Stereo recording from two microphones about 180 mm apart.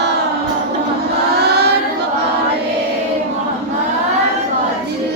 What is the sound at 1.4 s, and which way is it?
Child singing, 65° right (ahead or behind).